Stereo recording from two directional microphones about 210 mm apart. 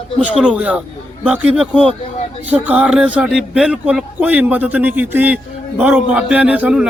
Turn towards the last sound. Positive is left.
turn(degrees=-5)  # may be behind; listen again after turning